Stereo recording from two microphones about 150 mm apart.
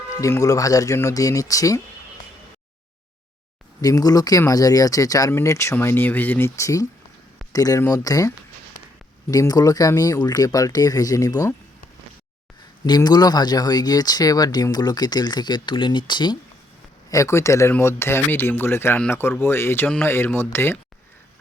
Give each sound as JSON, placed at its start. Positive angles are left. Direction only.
{"t": 0.2, "sound": "speech", "side_deg": 20}
{"t": 3.8, "sound": "speech", "side_deg": 25}
{"t": 9.3, "sound": "speech", "side_deg": 25}
{"t": 12.8, "sound": "speech", "side_deg": 25}